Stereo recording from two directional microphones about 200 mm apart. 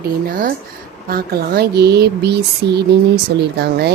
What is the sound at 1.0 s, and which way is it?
Speech, 50° right (ahead or behind).